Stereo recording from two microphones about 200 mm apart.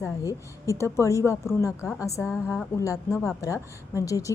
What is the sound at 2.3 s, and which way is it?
Speech, 5° right (ahead or behind).